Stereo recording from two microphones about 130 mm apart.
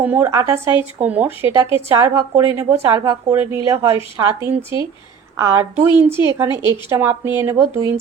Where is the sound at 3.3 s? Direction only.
20° right (ahead or behind).